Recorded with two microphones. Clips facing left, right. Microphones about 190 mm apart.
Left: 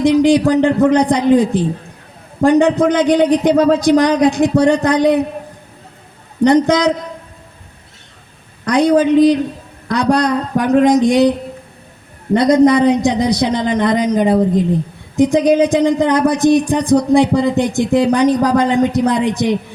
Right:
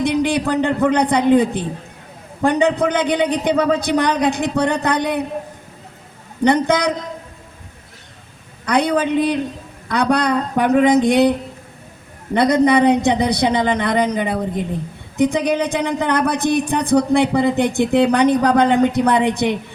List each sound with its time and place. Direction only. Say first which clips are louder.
0.0 s speech: left 7 dB; 60° right (ahead or behind)
2.6 s speech: left 5 dB; 60° right (ahead or behind)
6.4 s speech: left 4 dB; 60° right (ahead or behind)
8.6 s a woman's voice: left 5 dB; 60° right (ahead or behind)